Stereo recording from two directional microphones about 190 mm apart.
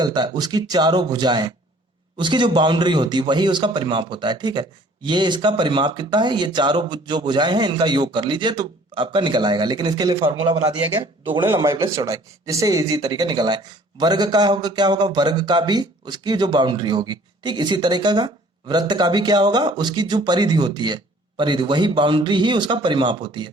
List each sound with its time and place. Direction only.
0.0 s speech: 20° right (ahead or behind)